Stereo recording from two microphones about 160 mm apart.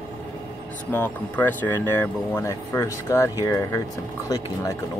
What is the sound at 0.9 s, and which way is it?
Speech, 10° left (ahead or behind).